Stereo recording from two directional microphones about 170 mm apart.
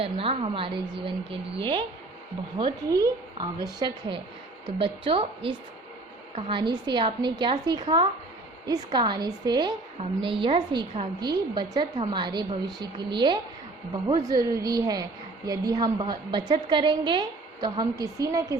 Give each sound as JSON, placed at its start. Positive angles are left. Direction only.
{"t": 0.0, "sound": "a woman's voice", "side_deg": -35}